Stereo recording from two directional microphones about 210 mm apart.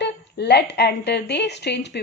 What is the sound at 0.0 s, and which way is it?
A woman's voice, 50° left (ahead or behind).